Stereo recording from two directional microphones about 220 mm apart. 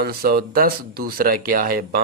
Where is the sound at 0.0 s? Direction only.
45° right (ahead or behind).